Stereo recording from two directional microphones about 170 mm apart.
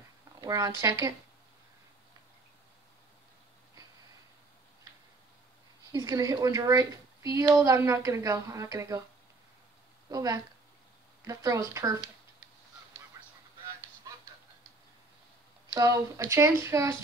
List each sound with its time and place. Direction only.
0.4 s speech: 20° right (ahead or behind)
5.9 s speech: 20° right (ahead or behind)
10.1 s speech: 20° right (ahead or behind)
13.2 s a sound: 20° right (ahead or behind)
15.7 s speech: 20° right (ahead or behind)